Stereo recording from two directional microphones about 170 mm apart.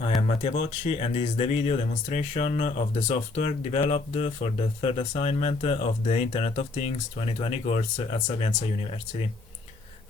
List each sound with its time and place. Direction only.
0.2 s speech: 35° left (ahead or behind)